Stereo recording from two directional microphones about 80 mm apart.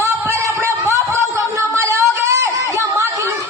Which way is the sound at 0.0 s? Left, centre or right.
Right.